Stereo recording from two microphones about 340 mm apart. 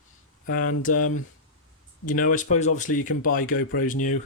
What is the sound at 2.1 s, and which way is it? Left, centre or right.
Speech, left.